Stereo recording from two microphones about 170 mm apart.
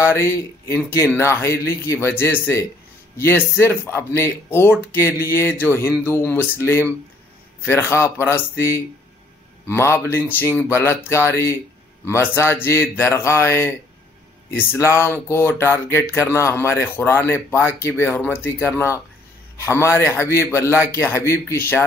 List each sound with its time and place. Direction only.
0.0 s speech: 15° left (ahead or behind)